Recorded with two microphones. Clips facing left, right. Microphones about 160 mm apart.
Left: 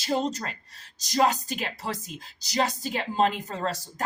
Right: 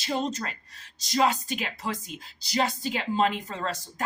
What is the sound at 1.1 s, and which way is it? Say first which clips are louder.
Speech: left 1 dB; 40° left (ahead or behind).